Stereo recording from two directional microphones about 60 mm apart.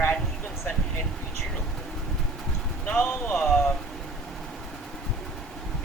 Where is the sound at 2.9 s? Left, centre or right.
Left.